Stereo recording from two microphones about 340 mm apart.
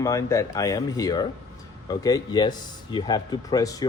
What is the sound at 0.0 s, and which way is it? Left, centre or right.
Speech, centre.